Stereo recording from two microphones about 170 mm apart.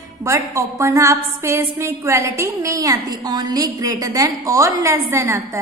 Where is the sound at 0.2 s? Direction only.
20° right (ahead or behind).